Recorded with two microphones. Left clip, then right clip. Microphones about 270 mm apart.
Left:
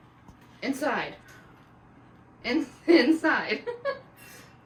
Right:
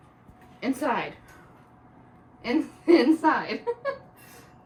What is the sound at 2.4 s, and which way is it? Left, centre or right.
A woman's voice, right.